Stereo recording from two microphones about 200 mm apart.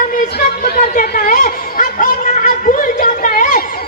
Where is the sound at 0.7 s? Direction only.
50° left (ahead or behind).